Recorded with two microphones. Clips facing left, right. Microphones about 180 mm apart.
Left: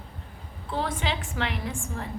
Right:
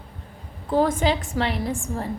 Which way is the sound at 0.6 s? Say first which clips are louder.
Right 9 dB; 45° right (ahead or behind).